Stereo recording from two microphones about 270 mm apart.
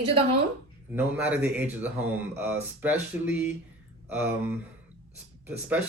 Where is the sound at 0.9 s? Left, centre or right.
Centre.